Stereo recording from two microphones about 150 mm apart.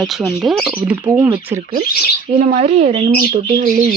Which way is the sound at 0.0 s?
Centre (ahead or behind).